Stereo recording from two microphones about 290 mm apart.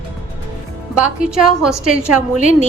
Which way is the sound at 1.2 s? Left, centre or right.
Centre.